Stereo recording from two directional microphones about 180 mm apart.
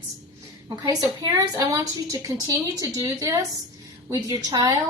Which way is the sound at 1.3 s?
20° right (ahead or behind).